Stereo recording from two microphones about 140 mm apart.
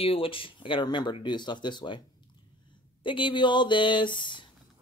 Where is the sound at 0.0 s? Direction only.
40° left (ahead or behind).